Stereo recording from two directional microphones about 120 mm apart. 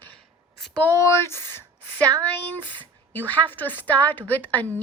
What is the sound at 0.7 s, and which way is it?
Speech, 20° left (ahead or behind).